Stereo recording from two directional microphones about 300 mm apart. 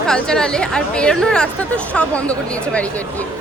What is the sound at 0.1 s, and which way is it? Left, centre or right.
Speech, centre.